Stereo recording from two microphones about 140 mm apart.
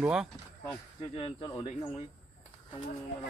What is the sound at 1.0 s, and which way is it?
Speech, 40° left (ahead or behind).